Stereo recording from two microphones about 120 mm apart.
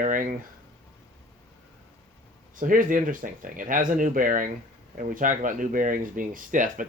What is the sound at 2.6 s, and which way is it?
Speech, 90° right.